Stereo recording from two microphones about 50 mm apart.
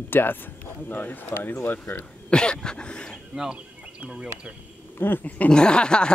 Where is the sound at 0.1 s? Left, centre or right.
Left.